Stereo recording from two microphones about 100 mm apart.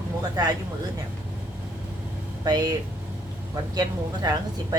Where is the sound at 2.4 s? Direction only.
40° right (ahead or behind).